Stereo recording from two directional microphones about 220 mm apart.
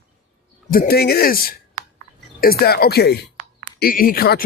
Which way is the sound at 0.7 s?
45° left (ahead or behind).